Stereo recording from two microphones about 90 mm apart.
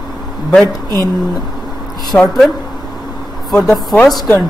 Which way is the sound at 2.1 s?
15° left (ahead or behind).